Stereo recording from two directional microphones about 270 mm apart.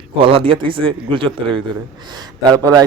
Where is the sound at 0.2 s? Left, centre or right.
Centre.